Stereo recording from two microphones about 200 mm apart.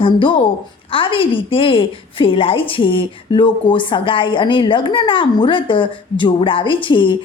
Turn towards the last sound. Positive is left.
turn(degrees=25)  # may be behind; listen again after turning